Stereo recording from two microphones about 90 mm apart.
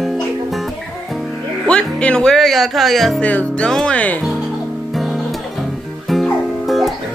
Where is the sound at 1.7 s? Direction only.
10° left (ahead or behind).